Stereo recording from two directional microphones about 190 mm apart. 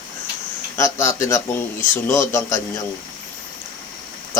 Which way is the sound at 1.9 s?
10° left (ahead or behind).